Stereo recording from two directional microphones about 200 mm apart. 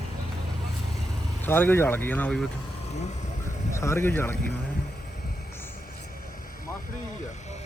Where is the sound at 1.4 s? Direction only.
10° left (ahead or behind).